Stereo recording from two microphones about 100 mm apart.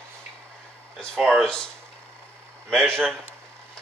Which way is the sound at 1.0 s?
5° left (ahead or behind).